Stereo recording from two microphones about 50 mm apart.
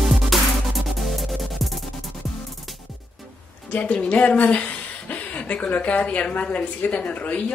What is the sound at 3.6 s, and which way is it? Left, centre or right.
Speech, left.